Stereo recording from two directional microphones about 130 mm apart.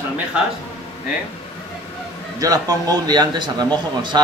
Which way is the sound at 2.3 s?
25° right (ahead or behind).